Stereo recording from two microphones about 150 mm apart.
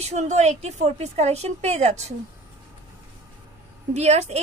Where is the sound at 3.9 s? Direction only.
50° right (ahead or behind).